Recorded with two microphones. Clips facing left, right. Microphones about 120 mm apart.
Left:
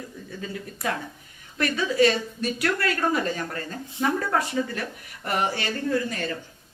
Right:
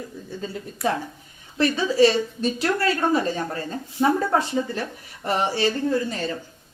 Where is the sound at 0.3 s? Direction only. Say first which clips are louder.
Right 2 dB; 30° right (ahead or behind).